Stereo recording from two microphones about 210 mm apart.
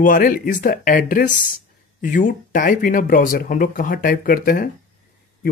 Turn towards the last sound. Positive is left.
turn(degrees=40)  # may be behind; listen again after turning